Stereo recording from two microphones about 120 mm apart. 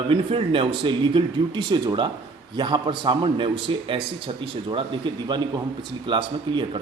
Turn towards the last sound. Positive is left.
turn(degrees=-40)  # may be behind; listen again after turning